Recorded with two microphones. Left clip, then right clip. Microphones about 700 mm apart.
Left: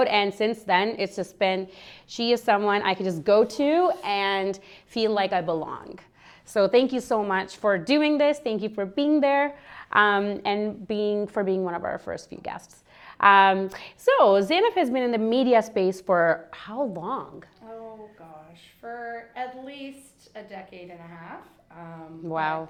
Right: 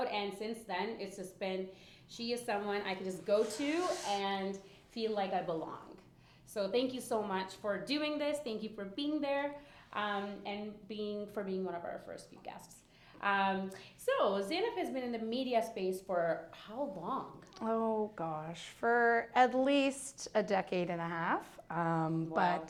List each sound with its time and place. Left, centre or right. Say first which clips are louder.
0.0 s a woman's voice: left 15 dB; left
3.6 s speech: left 14 dB; left
4.1 s a woman's voice: left 11 dB; left
17.6 s a sound: right 7 dB; right
18.8 s a sound: right 6 dB; right
20.3 s a woman's voice: right 8 dB; right